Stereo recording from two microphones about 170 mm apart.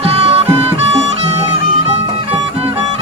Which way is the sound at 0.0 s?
35° right (ahead or behind).